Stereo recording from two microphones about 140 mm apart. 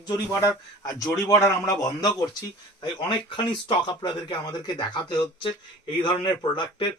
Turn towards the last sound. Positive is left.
turn(degrees=35)  # may be behind; listen again after turning